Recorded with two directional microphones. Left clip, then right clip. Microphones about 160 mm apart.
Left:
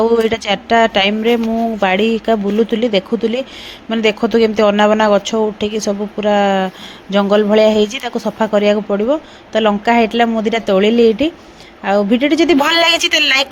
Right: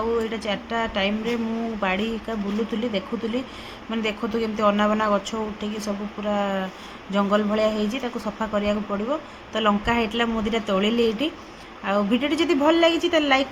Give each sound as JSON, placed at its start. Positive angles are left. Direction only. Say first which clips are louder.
{"t": 0.3, "sound": "a woman's voice", "louder": "left 12 dB", "side_deg": 50}
{"t": 12.6, "sound": "a woman's voice", "louder": "left 7 dB", "side_deg": 75}